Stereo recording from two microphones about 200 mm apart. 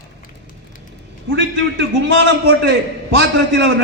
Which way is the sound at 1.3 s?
65° right (ahead or behind).